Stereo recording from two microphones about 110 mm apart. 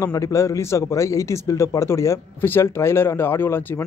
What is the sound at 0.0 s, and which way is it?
A man's voice, 30° left (ahead or behind).